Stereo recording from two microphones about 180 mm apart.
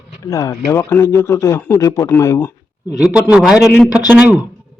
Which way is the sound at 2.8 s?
5° right (ahead or behind).